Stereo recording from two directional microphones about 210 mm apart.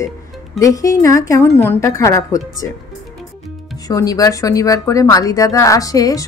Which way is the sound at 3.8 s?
15° left (ahead or behind).